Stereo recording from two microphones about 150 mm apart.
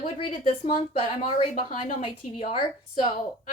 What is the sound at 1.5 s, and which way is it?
Speech, 60° left (ahead or behind).